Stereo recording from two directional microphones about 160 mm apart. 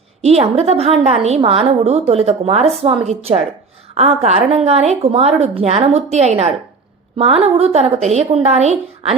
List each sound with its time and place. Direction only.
0.2 s a woman's voice: 40° right (ahead or behind)